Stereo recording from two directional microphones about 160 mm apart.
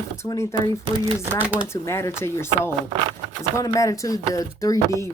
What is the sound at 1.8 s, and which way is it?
Speech, 15° left (ahead or behind).